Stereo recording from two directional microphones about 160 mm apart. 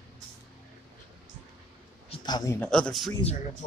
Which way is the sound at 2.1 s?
25° left (ahead or behind).